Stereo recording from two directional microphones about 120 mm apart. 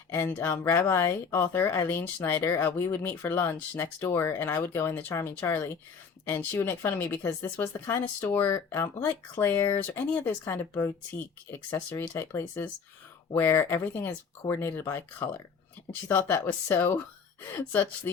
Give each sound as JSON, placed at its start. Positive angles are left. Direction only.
{"t": 0.1, "sound": "speech", "side_deg": 20}
{"t": 16.0, "sound": "speech", "side_deg": 20}